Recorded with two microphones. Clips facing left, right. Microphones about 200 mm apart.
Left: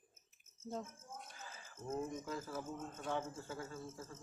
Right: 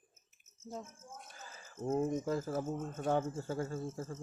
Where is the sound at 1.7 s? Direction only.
50° right (ahead or behind).